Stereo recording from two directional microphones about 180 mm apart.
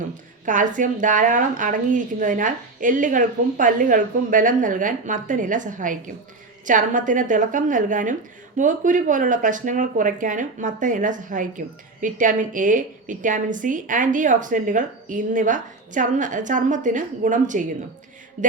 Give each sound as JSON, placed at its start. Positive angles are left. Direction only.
{"t": 0.4, "sound": "speech", "side_deg": -45}
{"t": 18.4, "sound": "mantra", "side_deg": -40}